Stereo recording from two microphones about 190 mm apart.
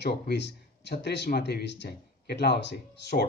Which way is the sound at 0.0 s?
60° left (ahead or behind).